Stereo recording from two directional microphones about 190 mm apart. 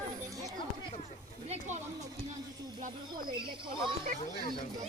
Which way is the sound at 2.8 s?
50° right (ahead or behind).